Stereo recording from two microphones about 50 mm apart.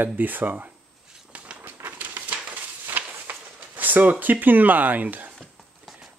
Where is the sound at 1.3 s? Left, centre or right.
Right.